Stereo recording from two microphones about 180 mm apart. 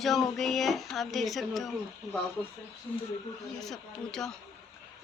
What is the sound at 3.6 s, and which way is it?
Speech, centre (ahead or behind).